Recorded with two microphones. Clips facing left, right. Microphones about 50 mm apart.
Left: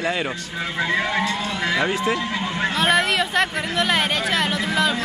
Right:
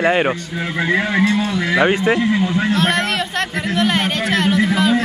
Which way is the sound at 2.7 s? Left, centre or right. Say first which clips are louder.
Right 1 dB; centre.